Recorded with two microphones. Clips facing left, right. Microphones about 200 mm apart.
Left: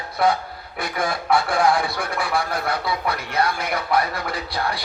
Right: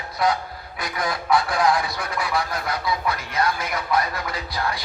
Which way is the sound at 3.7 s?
30° left (ahead or behind).